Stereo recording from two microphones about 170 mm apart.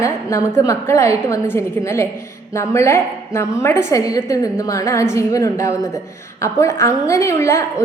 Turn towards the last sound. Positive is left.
turn(degrees=15)  # may be behind; listen again after turning